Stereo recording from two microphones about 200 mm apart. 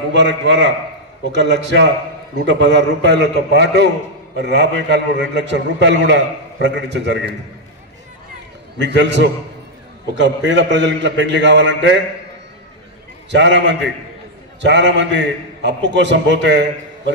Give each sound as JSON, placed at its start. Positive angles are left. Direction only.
{"t": 0.1, "sound": "a man's voice", "side_deg": -60}
{"t": 8.7, "sound": "a man's voice", "side_deg": -60}
{"t": 13.3, "sound": "a man's voice", "side_deg": -60}